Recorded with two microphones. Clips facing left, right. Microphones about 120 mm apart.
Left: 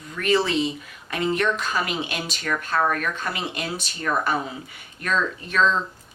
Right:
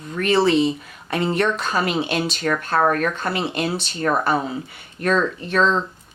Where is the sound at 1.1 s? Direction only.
35° right (ahead or behind).